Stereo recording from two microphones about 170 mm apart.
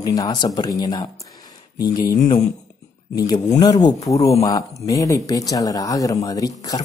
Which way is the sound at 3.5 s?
25° left (ahead or behind).